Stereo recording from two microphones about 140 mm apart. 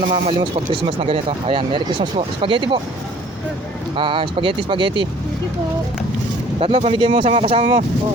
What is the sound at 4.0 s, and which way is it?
Speech, 35° right (ahead or behind).